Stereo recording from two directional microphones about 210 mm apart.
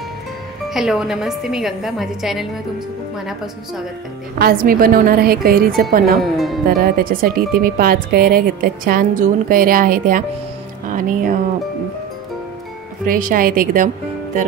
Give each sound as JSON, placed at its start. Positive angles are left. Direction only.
{"t": 0.7, "sound": "a woman's voice", "side_deg": 0}
{"t": 4.4, "sound": "speech", "side_deg": -45}
{"t": 6.3, "sound": "a woman's voice", "side_deg": 0}
{"t": 6.7, "sound": "speech", "side_deg": -45}
{"t": 13.1, "sound": "speech", "side_deg": -40}